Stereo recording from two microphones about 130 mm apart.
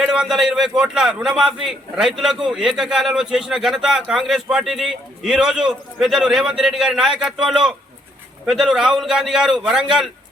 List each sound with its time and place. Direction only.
0.0 s a man's voice: 5° right (ahead or behind)